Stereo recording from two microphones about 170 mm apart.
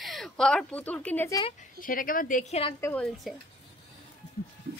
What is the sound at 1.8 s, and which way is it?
Speech, 55° left (ahead or behind).